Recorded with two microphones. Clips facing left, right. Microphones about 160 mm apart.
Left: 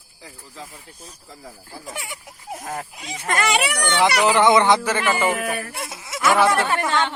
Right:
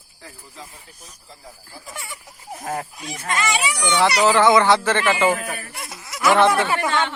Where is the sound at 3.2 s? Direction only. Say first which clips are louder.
Left 2 dB; 55° left (ahead or behind).